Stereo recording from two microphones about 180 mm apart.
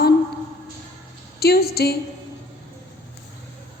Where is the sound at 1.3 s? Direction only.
60° left (ahead or behind).